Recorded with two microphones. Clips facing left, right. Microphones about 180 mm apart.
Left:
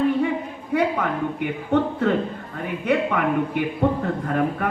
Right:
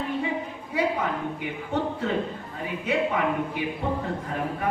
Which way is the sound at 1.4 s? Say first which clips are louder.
Left 7 dB; 60° left (ahead or behind).